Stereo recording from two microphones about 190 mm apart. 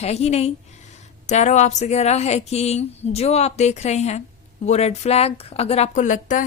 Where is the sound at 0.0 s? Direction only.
35° left (ahead or behind).